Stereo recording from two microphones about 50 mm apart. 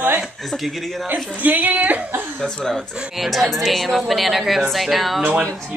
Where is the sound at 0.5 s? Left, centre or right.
Centre.